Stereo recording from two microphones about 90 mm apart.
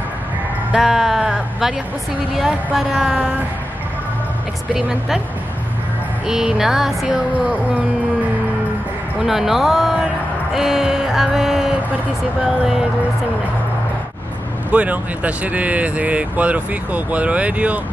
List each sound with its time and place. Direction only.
0.7 s sheep: 5° right (ahead or behind)
2.3 s music: 5° right (ahead or behind)
4.7 s speech: 5° right (ahead or behind)
6.2 s music: 5° right (ahead or behind)
9.2 s speech: 5° right (ahead or behind)
10.5 s a sound: 5° right (ahead or behind)
12.4 s music: 5° right (ahead or behind)
14.7 s speech: 15° right (ahead or behind)